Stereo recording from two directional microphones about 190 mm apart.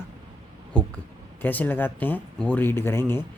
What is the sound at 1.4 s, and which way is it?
Speech, 10° left (ahead or behind).